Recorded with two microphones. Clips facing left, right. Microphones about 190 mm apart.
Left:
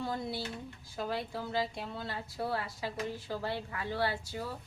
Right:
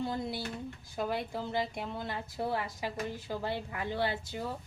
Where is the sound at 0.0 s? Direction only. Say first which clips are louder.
Right 1 dB; 20° right (ahead or behind).